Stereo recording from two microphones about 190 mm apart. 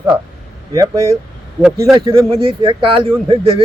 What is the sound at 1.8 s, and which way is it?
Speech, 15° right (ahead or behind).